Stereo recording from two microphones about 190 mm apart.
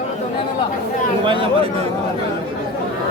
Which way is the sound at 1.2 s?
25° right (ahead or behind).